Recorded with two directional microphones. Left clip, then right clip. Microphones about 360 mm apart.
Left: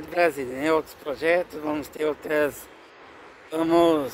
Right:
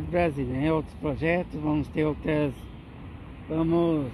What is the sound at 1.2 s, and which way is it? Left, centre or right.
Speech, centre.